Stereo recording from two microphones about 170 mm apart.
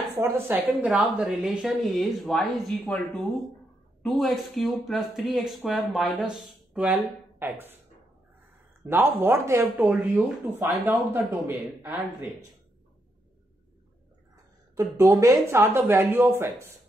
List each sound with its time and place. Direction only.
0.1 s a woman's voice: 15° right (ahead or behind); by 3.0 s 5° left (ahead or behind)
4.0 s speech: centre (ahead or behind)
8.8 s speech: 15° right (ahead or behind)
14.3 s speech: 20° right (ahead or behind)